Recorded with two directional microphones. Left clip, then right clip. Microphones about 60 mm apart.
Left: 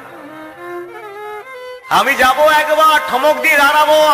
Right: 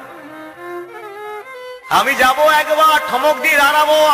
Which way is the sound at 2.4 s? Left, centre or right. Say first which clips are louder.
Left 2 dB; right.